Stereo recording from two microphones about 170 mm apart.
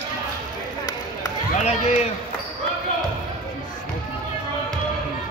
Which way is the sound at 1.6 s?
45° left (ahead or behind).